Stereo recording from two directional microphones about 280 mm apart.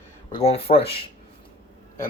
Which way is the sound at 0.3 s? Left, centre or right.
Left.